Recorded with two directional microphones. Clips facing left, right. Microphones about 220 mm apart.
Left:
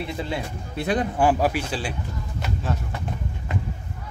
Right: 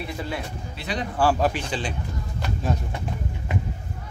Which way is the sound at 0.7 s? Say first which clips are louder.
Left 7 dB; 50° left (ahead or behind).